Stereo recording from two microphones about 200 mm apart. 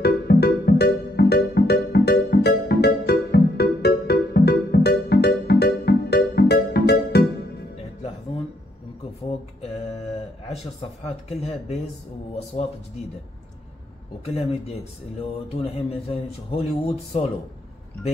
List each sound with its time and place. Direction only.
0.0 s music: 50° left (ahead or behind)
10.8 s speech: 30° left (ahead or behind)
14.2 s speech: 30° left (ahead or behind)